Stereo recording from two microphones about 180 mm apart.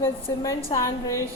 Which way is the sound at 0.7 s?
15° left (ahead or behind).